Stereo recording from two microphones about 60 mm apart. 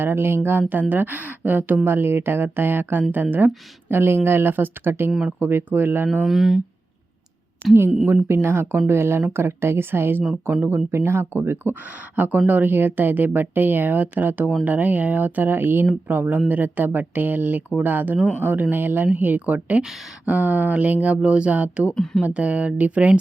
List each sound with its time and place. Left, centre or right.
0.0 s a woman's voice: right
6.2 s speech: centre
8.0 s a woman's voice: right
21.9 s speech: centre
22.2 s speech: right